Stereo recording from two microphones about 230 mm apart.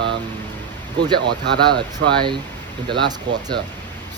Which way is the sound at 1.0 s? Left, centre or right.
Centre.